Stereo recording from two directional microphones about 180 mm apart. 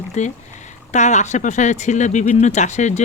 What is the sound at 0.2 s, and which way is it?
Speech, 40° left (ahead or behind).